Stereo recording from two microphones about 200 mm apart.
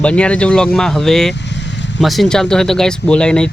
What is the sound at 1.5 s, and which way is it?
Vehicle, 60° left (ahead or behind).